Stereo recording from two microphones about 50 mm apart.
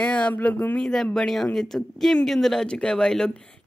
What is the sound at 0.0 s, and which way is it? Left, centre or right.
Speech, left.